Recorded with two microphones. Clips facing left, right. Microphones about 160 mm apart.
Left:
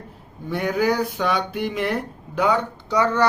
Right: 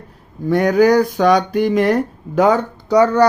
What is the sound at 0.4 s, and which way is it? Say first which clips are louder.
Speech: right 9 dB; 45° right (ahead or behind).